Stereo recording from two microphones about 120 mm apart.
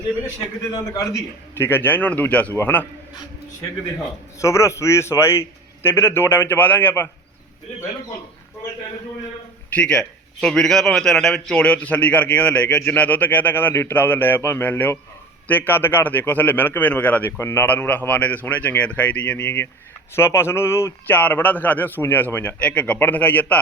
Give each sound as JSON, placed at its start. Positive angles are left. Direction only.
{"t": 0.7, "sound": "a man's voice", "side_deg": 30}
{"t": 4.4, "sound": "a man's voice", "side_deg": 25}
{"t": 9.7, "sound": "a man's voice", "side_deg": 10}